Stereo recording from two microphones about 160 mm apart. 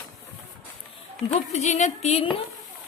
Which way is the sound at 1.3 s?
45° left (ahead or behind).